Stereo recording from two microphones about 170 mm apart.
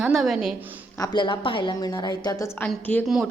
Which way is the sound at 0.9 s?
25° left (ahead or behind).